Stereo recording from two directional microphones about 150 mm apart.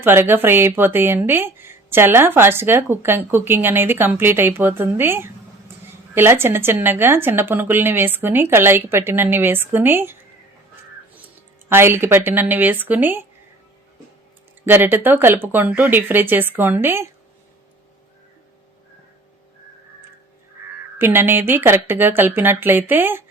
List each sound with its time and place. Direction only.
0.0 s speech: 15° right (ahead or behind)
11.7 s speech: 15° right (ahead or behind)
14.6 s speech: 15° right (ahead or behind)
21.0 s speech: 15° right (ahead or behind)